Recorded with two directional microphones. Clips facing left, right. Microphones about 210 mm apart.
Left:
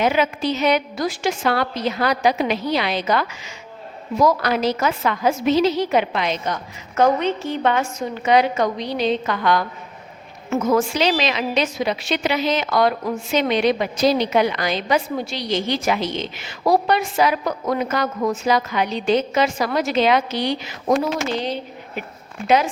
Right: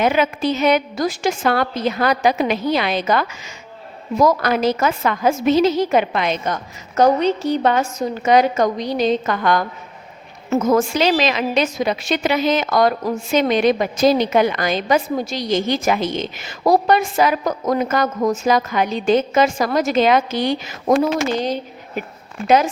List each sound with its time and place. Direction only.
0.0 s a woman's voice: 50° right (ahead or behind)